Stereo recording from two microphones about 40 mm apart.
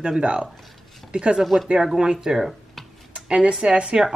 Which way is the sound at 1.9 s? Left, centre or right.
Right.